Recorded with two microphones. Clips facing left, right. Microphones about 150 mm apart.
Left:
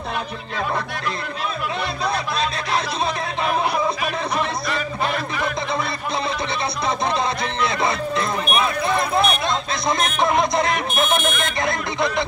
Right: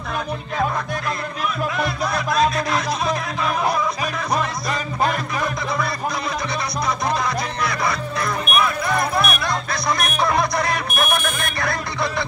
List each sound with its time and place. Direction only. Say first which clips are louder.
2.0 s music: right 4 dB; 30° left (ahead or behind)
4.6 s music: right 2 dB; 40° right (ahead or behind)
7.6 s music: left 4 dB; 25° left (ahead or behind)